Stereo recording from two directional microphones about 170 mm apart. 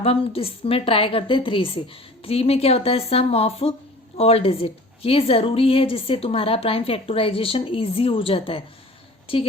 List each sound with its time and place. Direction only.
0.0 s a woman's voice: 35° left (ahead or behind)